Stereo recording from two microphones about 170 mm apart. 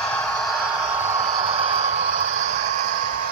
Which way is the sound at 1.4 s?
35° right (ahead or behind).